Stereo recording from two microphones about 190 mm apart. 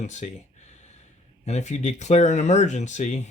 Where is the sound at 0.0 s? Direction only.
40° left (ahead or behind).